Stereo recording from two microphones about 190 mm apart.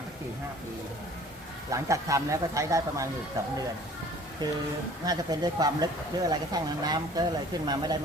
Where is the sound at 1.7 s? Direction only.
15° right (ahead or behind).